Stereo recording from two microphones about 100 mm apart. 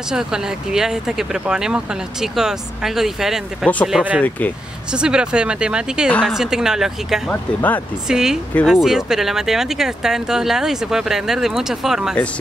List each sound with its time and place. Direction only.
0.1 s speech: 5° right (ahead or behind)
3.6 s speech: 10° left (ahead or behind)
4.9 s speech: 10° right (ahead or behind)
7.2 s speech: 15° left (ahead or behind)
8.1 s speech: 5° right (ahead or behind)